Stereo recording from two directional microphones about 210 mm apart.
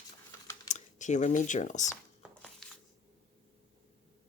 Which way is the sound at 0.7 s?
35° left (ahead or behind).